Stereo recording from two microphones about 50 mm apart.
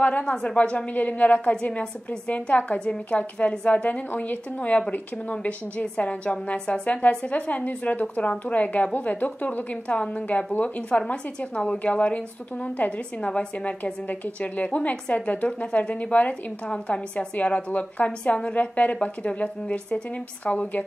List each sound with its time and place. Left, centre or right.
0.2 s a woman's voice: centre
0.6 s a woman's voice: left
13.2 s a woman's voice: left
14.0 s a woman's voice: left